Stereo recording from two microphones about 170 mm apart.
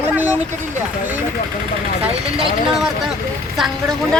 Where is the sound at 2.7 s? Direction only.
5° right (ahead or behind).